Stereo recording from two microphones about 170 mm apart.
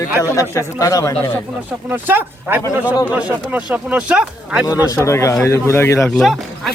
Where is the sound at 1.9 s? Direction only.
10° right (ahead or behind).